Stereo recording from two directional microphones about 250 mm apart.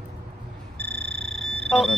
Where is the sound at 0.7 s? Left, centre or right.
Centre.